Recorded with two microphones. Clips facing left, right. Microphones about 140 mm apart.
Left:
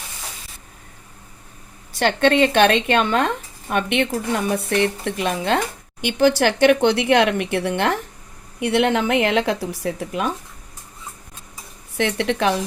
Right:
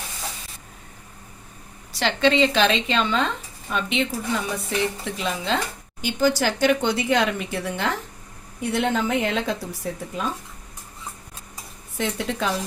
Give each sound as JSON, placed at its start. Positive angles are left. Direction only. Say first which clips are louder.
{"t": 2.0, "sound": "a woman's voice", "louder": "left 3 dB", "side_deg": 55}
{"t": 11.9, "sound": "a woman's voice", "louder": "left 5 dB", "side_deg": 75}